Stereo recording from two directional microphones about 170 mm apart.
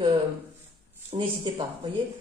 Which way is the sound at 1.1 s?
30° right (ahead or behind).